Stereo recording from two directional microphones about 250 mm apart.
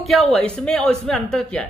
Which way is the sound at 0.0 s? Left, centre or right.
Centre.